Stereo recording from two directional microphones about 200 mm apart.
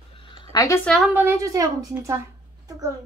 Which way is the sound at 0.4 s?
20° left (ahead or behind).